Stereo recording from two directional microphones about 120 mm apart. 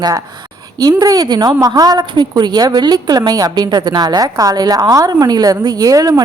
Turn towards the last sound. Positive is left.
turn(degrees=-30)  # may be behind; listen again after turning